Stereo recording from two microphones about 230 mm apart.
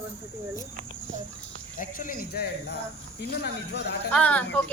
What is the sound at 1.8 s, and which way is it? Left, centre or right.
Speech, left.